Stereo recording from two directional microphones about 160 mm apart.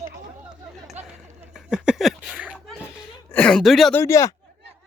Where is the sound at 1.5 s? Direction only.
5° right (ahead or behind).